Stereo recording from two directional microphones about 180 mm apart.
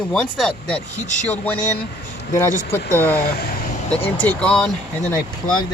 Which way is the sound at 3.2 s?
60° left (ahead or behind).